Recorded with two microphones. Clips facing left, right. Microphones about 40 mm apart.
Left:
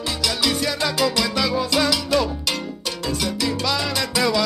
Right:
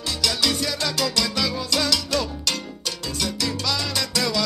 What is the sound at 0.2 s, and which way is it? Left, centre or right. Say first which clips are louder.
Music: left 1 dB; centre.